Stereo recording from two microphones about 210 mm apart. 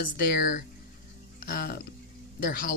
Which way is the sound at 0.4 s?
45° left (ahead or behind).